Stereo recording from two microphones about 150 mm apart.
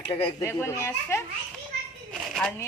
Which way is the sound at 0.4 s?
15° left (ahead or behind).